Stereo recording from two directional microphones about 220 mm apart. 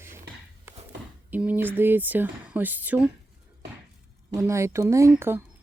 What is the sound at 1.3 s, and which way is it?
Speech, 5° right (ahead or behind).